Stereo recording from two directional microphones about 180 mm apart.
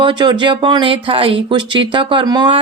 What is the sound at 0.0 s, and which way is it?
Speech, 25° right (ahead or behind).